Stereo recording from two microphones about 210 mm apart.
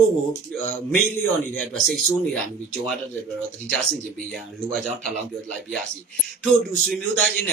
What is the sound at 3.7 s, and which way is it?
Speech, centre (ahead or behind).